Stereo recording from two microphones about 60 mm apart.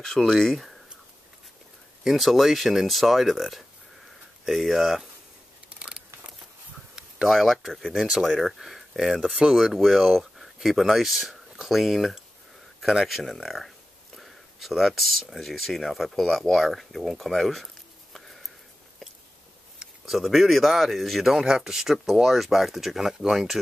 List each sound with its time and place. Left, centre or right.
0.0 s speech: centre
2.0 s speech: centre
5.7 s a sound: centre
7.3 s speech: centre
18.1 s a sound: centre
19.8 s speech: centre